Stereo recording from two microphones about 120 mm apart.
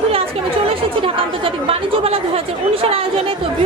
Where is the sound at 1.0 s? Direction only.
50° right (ahead or behind).